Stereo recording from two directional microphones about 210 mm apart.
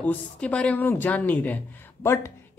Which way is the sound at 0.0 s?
5° left (ahead or behind).